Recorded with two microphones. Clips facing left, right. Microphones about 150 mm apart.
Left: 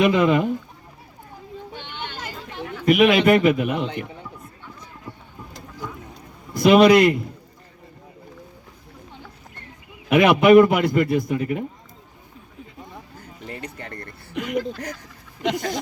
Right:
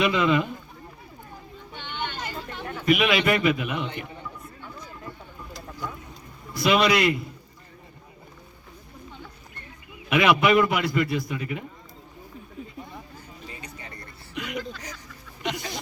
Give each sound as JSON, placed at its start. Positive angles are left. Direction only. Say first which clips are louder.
{"t": 0.0, "sound": "a man's voice", "louder": "left 5 dB", "side_deg": 45}
{"t": 2.8, "sound": "a man's voice", "louder": "left 6 dB", "side_deg": 50}
{"t": 6.5, "sound": "a man's voice", "louder": "left 8 dB", "side_deg": 50}
{"t": 10.1, "sound": "a man's voice", "louder": "left 6 dB", "side_deg": 50}
{"t": 13.4, "sound": "a sound", "louder": "left 9 dB", "side_deg": 65}
{"t": 15.5, "sound": "a man's voice", "louder": "left 8 dB", "side_deg": 50}